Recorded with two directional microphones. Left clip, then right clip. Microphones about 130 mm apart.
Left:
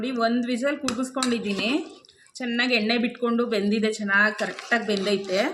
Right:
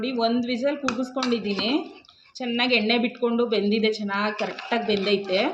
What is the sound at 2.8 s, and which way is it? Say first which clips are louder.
Speech: right 1 dB; 15° left (ahead or behind).